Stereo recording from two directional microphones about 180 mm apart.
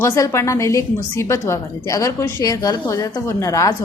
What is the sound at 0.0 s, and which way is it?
A woman's voice, 15° left (ahead or behind).